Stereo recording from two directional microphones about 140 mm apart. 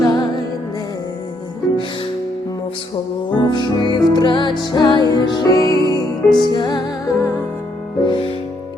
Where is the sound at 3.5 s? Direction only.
30° left (ahead or behind).